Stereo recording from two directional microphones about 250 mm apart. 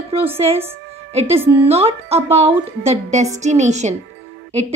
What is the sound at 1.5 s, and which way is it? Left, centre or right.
A woman's voice, right.